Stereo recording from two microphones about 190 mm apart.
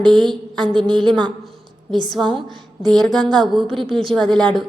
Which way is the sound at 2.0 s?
25° right (ahead or behind).